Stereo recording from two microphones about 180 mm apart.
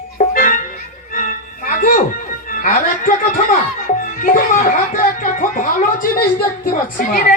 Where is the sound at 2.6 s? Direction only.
50° left (ahead or behind).